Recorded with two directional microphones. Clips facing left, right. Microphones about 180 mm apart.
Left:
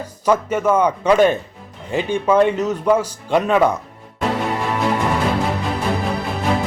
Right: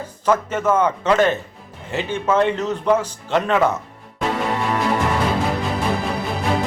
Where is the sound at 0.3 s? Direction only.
10° left (ahead or behind).